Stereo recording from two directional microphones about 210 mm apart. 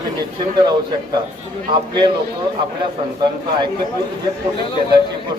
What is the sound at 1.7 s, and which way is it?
Speech, 20° right (ahead or behind).